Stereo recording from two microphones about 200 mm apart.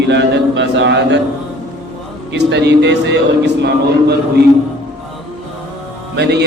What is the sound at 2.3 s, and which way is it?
Speech, 60° right (ahead or behind).